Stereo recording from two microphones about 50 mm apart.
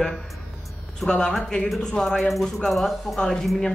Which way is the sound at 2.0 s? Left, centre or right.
Centre.